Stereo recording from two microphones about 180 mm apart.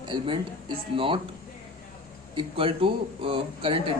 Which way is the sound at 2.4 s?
30° right (ahead or behind).